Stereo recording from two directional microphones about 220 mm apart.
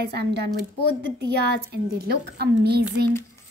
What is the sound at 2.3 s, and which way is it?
Speech, 50° right (ahead or behind).